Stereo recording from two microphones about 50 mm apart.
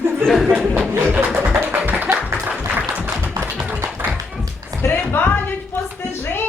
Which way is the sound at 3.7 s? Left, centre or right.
Right.